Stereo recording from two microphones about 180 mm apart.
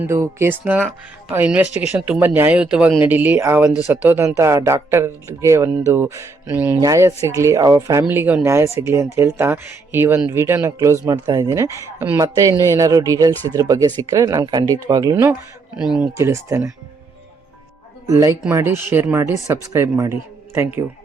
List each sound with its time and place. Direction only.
0.0 s speech: 15° right (ahead or behind)
16.1 s speech: 15° right (ahead or behind)
18.0 s speech: 20° right (ahead or behind)